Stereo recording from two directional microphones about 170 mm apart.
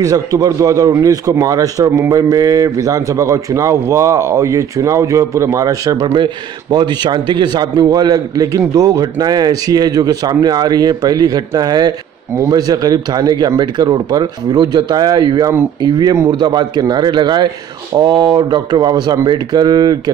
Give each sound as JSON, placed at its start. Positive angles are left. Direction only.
{"t": 0.0, "sound": "a man's voice", "side_deg": -20}